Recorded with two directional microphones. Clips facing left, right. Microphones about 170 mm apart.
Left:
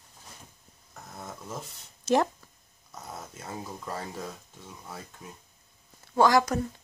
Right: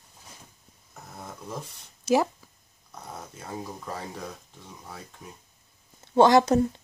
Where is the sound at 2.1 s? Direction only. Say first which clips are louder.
Right 1 dB; 5° right (ahead or behind).